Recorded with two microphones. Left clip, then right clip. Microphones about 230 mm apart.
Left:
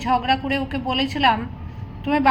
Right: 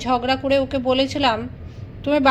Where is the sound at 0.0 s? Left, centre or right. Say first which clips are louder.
Even; right.